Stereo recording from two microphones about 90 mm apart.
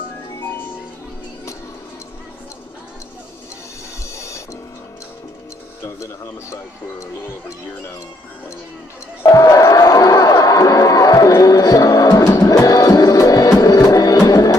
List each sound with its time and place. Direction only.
4.1 s music: 30° left (ahead or behind)
6.5 s speech: 35° left (ahead or behind)
9.2 s crowd: 40° left (ahead or behind)
12.3 s music: 40° left (ahead or behind)